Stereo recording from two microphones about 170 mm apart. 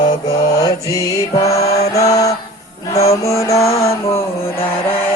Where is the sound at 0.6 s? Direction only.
20° left (ahead or behind).